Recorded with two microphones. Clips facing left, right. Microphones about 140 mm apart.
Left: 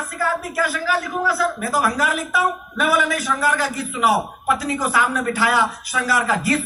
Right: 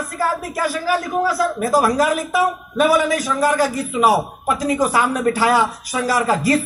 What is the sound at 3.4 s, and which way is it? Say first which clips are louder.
Speech: right 4 dB; 40° right (ahead or behind).